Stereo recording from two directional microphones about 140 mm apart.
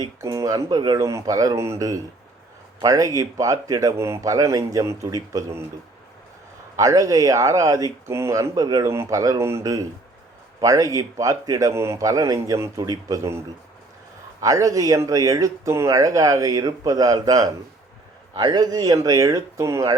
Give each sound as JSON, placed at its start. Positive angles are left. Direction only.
{"t": 0.0, "sound": "speech", "side_deg": -25}
{"t": 6.7, "sound": "speech", "side_deg": -25}
{"t": 14.4, "sound": "speech", "side_deg": -25}